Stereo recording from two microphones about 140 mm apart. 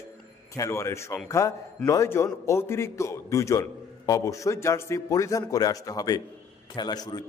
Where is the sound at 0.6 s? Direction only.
20° left (ahead or behind).